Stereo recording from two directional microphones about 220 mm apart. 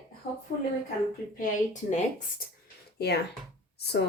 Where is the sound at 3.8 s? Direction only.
50° left (ahead or behind).